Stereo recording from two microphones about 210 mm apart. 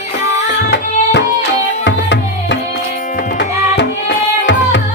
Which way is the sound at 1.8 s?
55° left (ahead or behind).